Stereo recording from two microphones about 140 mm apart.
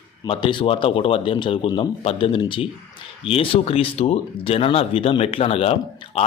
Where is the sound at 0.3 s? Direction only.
35° left (ahead or behind).